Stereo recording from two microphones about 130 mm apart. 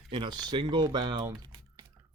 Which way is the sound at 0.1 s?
35° right (ahead or behind).